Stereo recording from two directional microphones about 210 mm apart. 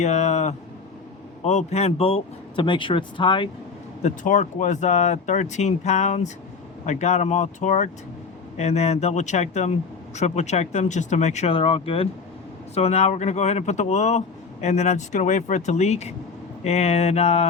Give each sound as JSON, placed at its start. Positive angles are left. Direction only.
{"t": 0.0, "sound": "a sound", "side_deg": 30}
{"t": 1.5, "sound": "speech", "side_deg": 30}
{"t": 4.0, "sound": "speech", "side_deg": 35}